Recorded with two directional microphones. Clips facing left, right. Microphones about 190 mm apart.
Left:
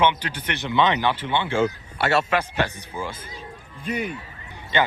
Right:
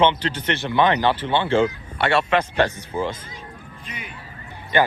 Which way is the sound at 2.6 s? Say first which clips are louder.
Right 5 dB; 15° left (ahead or behind).